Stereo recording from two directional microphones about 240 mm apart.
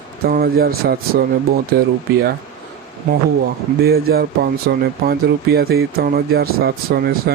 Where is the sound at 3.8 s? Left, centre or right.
Right.